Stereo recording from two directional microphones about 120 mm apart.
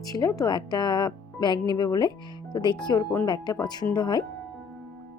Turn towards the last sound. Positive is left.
turn(degrees=35)  # may be behind; listen again after turning